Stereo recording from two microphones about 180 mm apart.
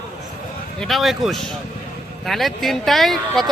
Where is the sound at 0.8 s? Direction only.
Centre (ahead or behind).